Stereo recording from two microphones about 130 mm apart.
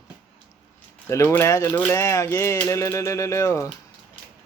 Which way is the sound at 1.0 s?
20° left (ahead or behind).